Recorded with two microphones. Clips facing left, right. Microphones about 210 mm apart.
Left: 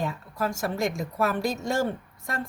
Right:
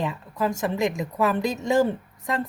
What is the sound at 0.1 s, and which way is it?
Speech, 20° right (ahead or behind).